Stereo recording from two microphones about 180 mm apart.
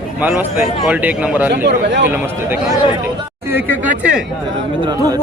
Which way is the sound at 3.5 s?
10° right (ahead or behind).